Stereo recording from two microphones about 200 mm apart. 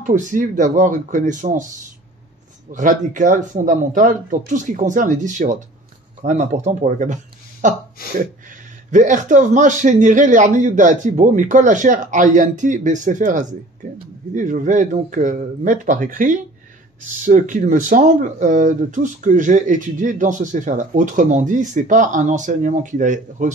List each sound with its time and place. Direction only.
0.0 s speech: 40° right (ahead or behind)
2.7 s speech: 40° right (ahead or behind)
8.9 s speech: 40° right (ahead or behind)